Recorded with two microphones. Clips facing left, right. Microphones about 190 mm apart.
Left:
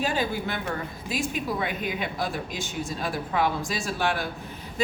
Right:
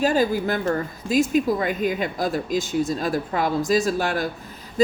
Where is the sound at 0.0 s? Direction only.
40° right (ahead or behind).